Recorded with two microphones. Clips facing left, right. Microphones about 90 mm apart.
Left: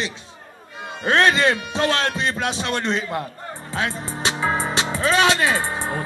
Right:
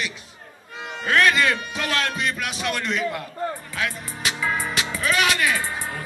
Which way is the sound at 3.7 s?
30° left (ahead or behind).